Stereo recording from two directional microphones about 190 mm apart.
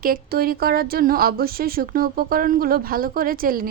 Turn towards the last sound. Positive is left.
turn(degrees=-50)  # may be behind; listen again after turning